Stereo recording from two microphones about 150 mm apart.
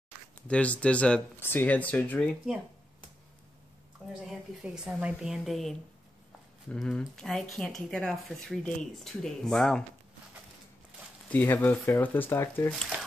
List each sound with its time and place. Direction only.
0.5 s speech: 10° left (ahead or behind)
4.3 s speech: 5° right (ahead or behind)
11.2 s speech: 10° left (ahead or behind)